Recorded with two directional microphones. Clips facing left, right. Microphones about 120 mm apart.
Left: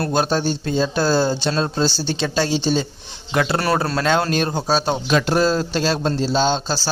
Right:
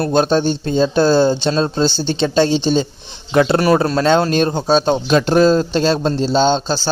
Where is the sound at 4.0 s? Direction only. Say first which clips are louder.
Right 5 dB; 25° right (ahead or behind).